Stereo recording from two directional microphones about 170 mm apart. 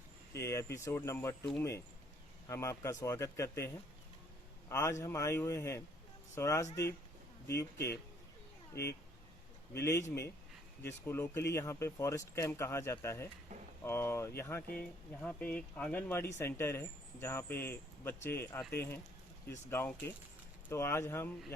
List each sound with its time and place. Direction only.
0.3 s speech: 15° left (ahead or behind)
2.5 s speech: 15° left (ahead or behind)
4.7 s speech: 15° left (ahead or behind)
13.5 s speech: 45° right (ahead or behind)
13.8 s speech: 15° left (ahead or behind)